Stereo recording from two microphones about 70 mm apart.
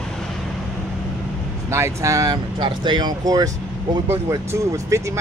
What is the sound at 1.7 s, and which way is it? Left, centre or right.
Speech, right.